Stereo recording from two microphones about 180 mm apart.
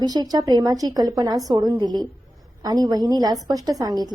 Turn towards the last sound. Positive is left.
turn(degrees=-20)  # may be behind; listen again after turning